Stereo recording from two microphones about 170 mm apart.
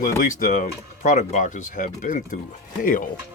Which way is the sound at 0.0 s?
50° left (ahead or behind).